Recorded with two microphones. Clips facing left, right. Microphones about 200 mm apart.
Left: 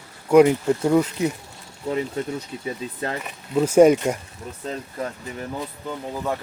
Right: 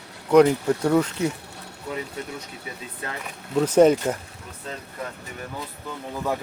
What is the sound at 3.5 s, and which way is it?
Speech, 10° left (ahead or behind).